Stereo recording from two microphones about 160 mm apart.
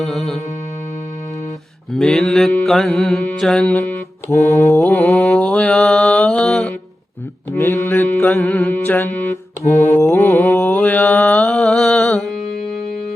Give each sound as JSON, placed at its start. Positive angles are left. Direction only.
{"t": 0.0, "sound": "mantra", "side_deg": 0}
{"t": 1.9, "sound": "mantra", "side_deg": 0}
{"t": 7.5, "sound": "mantra", "side_deg": 15}
{"t": 8.4, "sound": "mantra", "side_deg": 5}